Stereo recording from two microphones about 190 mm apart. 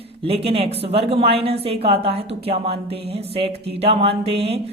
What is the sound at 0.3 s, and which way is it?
A woman's voice, 30° right (ahead or behind).